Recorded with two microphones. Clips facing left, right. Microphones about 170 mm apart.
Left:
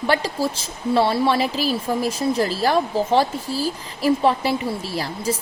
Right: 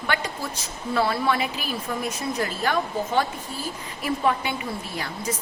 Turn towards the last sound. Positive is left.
turn(degrees=30)  # may be behind; listen again after turning